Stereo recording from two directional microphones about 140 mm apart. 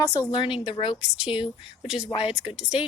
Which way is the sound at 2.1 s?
40° left (ahead or behind).